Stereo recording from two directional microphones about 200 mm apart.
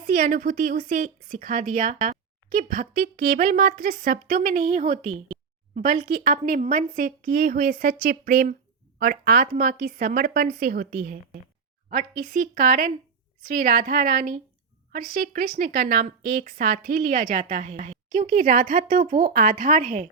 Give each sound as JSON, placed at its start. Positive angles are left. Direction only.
{"t": 0.0, "sound": "speech", "side_deg": -45}